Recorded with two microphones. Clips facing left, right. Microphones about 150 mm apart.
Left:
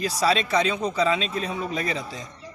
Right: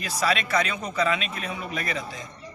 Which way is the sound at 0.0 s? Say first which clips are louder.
Left 3 dB; 30° left (ahead or behind).